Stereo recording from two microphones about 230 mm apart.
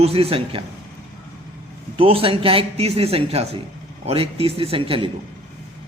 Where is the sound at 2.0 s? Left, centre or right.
Right.